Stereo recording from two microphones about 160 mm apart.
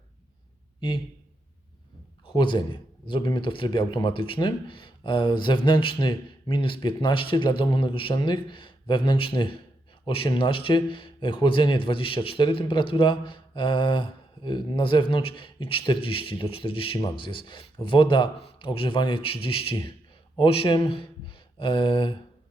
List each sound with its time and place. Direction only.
2.2 s a man's voice: 30° left (ahead or behind)